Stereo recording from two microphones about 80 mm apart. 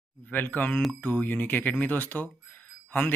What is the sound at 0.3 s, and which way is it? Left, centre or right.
Speech, left.